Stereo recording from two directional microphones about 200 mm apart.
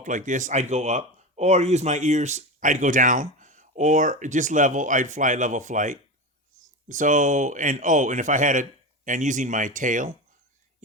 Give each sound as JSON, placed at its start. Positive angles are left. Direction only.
{"t": 0.0, "sound": "speech", "side_deg": -40}